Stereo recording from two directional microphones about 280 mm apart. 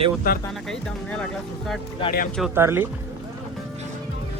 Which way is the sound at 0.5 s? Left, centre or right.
Centre.